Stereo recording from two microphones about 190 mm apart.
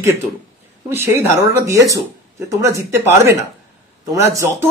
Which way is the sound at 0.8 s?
15° right (ahead or behind).